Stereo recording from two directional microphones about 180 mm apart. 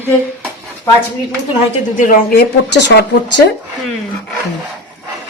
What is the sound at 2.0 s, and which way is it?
Speech, 55° left (ahead or behind).